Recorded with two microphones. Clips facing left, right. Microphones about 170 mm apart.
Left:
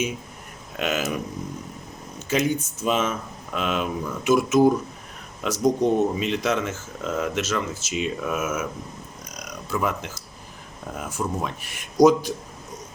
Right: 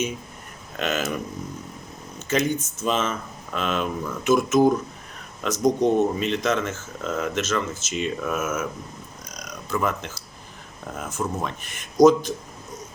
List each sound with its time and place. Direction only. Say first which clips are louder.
0.8 s speech: even; 10° left (ahead or behind)
9.6 s speech: right 1 dB; 5° left (ahead or behind)